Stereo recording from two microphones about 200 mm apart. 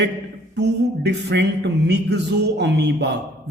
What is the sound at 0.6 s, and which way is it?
A man's voice, 60° right (ahead or behind).